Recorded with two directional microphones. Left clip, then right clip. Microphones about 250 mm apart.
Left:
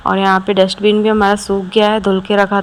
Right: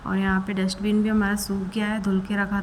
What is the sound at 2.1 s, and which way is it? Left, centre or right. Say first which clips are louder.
Speech: left 14 dB; left.